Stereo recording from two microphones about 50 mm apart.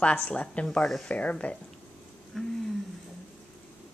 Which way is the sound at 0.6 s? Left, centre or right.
Centre.